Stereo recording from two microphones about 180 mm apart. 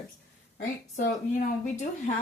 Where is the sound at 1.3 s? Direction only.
40° left (ahead or behind).